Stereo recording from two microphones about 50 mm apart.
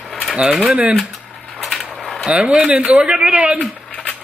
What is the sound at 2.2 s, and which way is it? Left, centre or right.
A man's voice, centre.